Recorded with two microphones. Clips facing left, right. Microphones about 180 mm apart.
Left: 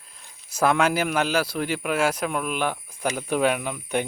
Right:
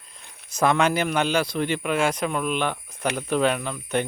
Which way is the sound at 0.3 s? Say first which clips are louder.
Right 3 dB; 65° right (ahead or behind).